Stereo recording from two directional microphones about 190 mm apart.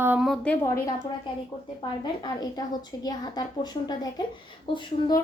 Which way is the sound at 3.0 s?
20° left (ahead or behind).